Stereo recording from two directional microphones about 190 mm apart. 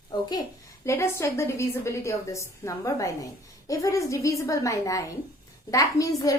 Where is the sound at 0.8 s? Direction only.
15° left (ahead or behind).